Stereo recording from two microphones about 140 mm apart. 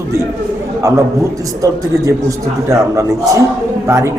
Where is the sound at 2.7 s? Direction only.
20° right (ahead or behind).